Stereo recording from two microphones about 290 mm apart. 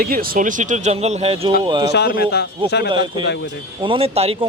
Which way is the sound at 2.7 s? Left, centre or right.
Left.